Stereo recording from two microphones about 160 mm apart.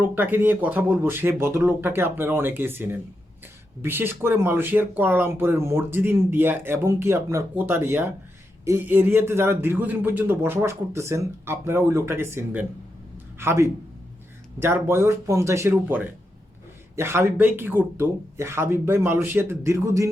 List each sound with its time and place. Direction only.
0.0 s speech: 10° right (ahead or behind)